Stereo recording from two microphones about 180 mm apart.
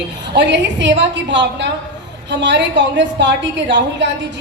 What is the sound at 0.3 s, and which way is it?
A woman's voice, 75° right (ahead or behind).